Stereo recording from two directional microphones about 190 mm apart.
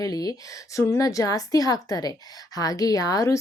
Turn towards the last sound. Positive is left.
turn(degrees=20)  # may be behind; listen again after turning